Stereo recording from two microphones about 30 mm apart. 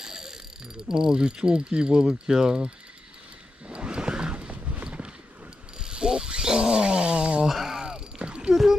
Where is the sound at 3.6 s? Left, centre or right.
Right.